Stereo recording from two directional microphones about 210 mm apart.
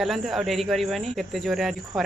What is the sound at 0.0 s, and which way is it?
Speech, centre (ahead or behind).